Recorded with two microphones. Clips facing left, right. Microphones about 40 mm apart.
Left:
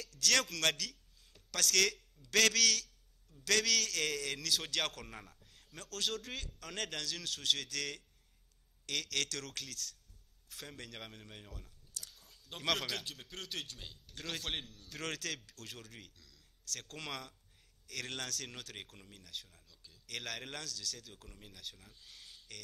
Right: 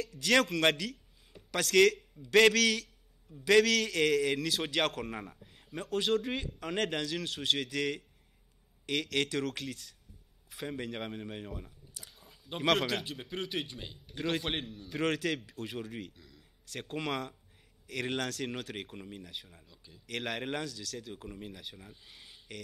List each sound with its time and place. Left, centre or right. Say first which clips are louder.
0.0 s a man's voice: right 6 dB; right